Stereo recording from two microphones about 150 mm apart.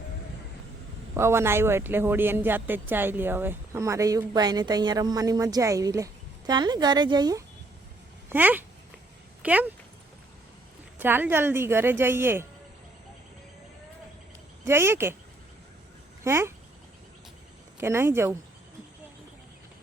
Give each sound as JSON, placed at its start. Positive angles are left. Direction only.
{"t": 1.1, "sound": "speech", "side_deg": -15}
{"t": 8.3, "sound": "speech", "side_deg": -10}
{"t": 10.9, "sound": "speech", "side_deg": -15}
{"t": 14.6, "sound": "speech", "side_deg": -15}
{"t": 16.2, "sound": "speech", "side_deg": -15}
{"t": 17.7, "sound": "speech", "side_deg": -15}